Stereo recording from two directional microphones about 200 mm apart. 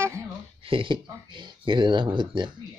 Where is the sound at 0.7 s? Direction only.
25° right (ahead or behind).